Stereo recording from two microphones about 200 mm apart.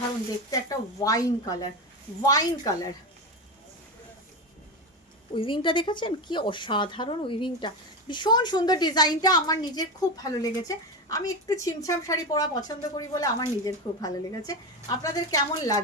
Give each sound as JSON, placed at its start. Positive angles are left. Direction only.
{"t": 0.5, "sound": "speech", "side_deg": 15}
{"t": 5.4, "sound": "a woman's voice", "side_deg": 25}